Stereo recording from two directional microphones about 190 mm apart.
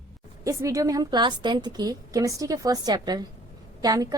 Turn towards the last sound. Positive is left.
turn(degrees=-20)  # may be behind; listen again after turning